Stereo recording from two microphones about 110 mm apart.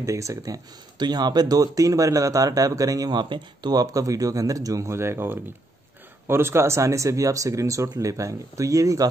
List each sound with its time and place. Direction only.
0.0 s speech: 30° right (ahead or behind)